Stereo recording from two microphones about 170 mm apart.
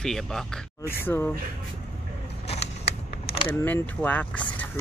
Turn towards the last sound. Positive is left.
turn(degrees=10)  # may be behind; listen again after turning